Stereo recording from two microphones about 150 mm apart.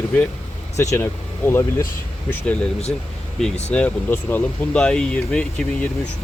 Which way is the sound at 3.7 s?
10° left (ahead or behind).